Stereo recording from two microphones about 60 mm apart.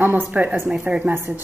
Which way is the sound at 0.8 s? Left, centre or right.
Right.